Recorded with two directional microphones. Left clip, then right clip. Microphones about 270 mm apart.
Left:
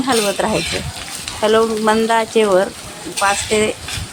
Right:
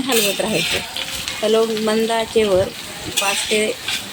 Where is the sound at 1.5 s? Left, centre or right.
Centre.